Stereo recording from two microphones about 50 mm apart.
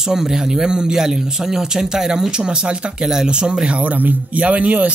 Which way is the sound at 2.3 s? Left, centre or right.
Centre.